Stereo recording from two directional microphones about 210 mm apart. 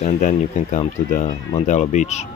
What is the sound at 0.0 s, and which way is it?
Speech, 35° left (ahead or behind).